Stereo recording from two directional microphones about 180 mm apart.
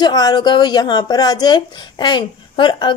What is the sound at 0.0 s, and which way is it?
A woman's voice, 20° left (ahead or behind).